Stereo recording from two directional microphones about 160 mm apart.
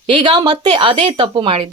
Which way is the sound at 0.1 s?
30° right (ahead or behind).